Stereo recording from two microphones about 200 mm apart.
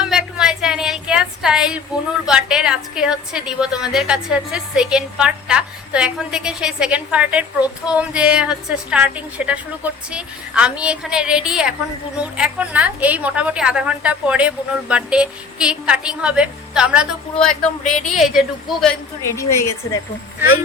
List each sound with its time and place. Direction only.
0.0 s a sound: 5° right (ahead or behind)
2.2 s a woman's voice: 5° right (ahead or behind)
19.3 s a woman's voice: 15° left (ahead or behind)